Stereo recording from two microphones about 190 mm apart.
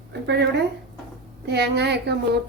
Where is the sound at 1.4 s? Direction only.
60° right (ahead or behind).